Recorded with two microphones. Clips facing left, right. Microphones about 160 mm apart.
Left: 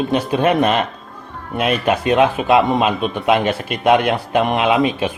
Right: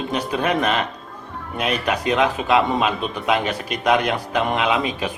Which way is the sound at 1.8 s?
20° left (ahead or behind).